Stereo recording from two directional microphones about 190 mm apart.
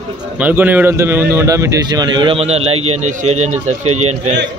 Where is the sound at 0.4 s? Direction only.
10° right (ahead or behind); by 4.4 s 35° right (ahead or behind).